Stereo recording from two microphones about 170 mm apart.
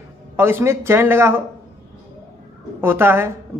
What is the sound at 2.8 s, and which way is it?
Speech, 15° right (ahead or behind).